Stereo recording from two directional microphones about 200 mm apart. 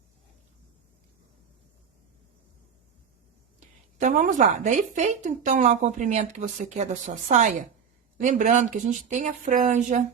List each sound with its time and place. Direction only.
3.9 s a woman's voice: 40° right (ahead or behind)